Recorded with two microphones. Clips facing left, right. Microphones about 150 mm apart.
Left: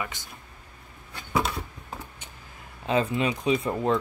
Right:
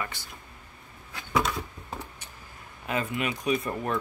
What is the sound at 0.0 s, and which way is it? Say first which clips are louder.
Speech: left 1 dB; 20° left (ahead or behind).